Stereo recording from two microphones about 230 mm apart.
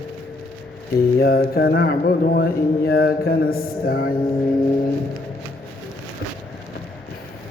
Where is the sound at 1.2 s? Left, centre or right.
Left.